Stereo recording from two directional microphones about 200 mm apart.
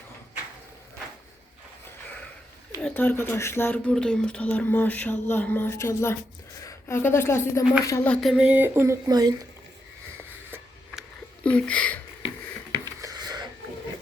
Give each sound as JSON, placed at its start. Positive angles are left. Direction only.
{"t": 2.8, "sound": "a woman's voice", "side_deg": 10}
{"t": 11.4, "sound": "speech", "side_deg": 5}
{"t": 12.7, "sound": "a sound", "side_deg": -20}